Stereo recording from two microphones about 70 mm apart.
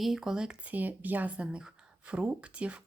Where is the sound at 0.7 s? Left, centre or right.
Right.